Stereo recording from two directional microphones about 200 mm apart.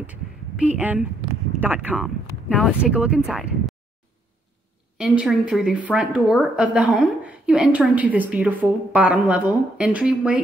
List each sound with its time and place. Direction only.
0.0 s a sound: 5° right (ahead or behind)
1.6 s a woman's voice: 10° right (ahead or behind)
4.9 s a woman's voice: 5° right (ahead or behind)